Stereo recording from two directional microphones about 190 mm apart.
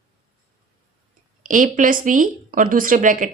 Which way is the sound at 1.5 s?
45° right (ahead or behind).